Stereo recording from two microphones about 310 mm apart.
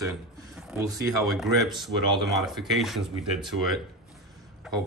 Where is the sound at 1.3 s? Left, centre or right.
Centre.